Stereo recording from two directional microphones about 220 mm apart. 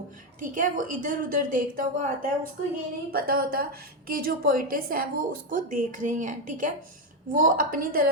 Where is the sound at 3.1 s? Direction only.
45° right (ahead or behind).